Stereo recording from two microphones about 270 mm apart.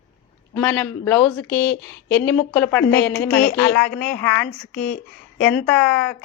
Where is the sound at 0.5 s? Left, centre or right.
Centre.